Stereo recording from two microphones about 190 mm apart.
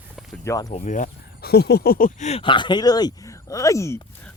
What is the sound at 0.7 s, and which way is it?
Speech, 40° left (ahead or behind).